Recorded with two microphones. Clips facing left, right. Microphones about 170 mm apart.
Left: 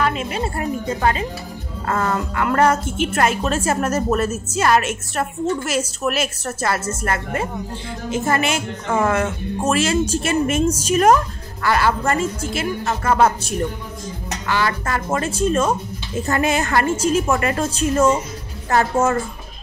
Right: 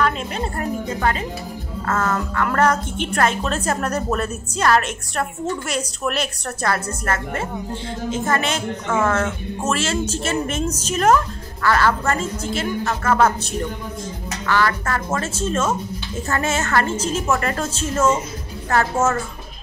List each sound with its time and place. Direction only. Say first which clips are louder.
0.0 s a woman's voice: left 1 dB; 5° left (ahead or behind)
1.9 s a woman's voice: left 1 dB; 15° left (ahead or behind)